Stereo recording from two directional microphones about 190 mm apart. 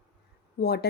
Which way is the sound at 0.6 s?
55° left (ahead or behind).